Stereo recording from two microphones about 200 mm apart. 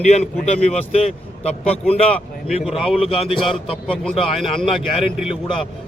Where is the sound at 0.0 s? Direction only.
35° left (ahead or behind).